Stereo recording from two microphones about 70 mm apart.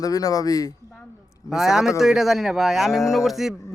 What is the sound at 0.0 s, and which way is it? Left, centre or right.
Speech, left.